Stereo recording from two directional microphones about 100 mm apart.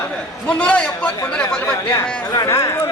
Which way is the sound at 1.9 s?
35° left (ahead or behind).